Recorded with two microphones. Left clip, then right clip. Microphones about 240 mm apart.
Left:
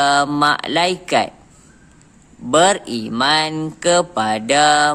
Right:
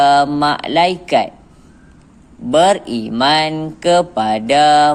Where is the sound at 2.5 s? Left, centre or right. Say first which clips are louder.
Right 2 dB; left.